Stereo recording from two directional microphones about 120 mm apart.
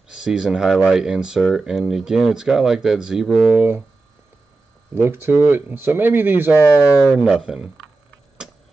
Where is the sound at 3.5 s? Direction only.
15° right (ahead or behind).